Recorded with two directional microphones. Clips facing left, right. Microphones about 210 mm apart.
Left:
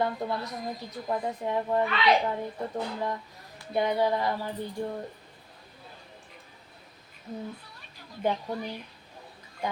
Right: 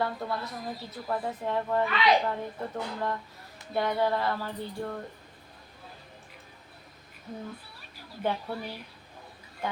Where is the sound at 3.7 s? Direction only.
15° left (ahead or behind).